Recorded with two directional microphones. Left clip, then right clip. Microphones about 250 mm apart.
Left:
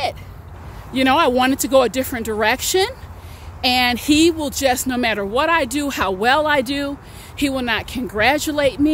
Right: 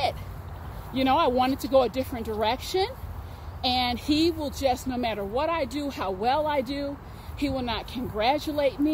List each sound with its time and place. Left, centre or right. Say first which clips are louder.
0.9 s speech: left 7 dB; left